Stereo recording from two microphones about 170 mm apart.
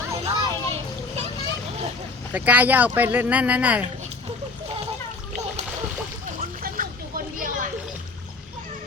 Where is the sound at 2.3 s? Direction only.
10° right (ahead or behind).